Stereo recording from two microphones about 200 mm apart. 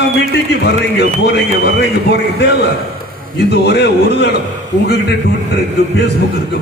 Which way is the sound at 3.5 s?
55° left (ahead or behind).